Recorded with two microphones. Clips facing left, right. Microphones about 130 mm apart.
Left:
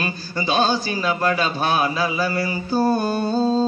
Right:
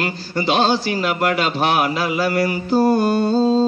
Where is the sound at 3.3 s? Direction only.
25° right (ahead or behind).